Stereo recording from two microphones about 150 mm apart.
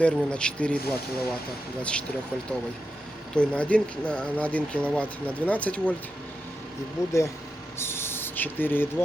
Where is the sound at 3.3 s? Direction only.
5° left (ahead or behind).